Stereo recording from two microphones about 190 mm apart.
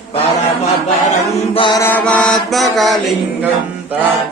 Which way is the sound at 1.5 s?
25° left (ahead or behind).